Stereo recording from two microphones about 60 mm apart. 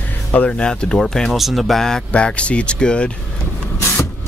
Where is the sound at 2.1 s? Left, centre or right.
Centre.